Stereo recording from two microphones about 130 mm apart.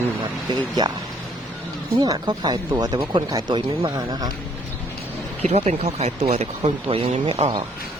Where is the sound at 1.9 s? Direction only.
25° right (ahead or behind).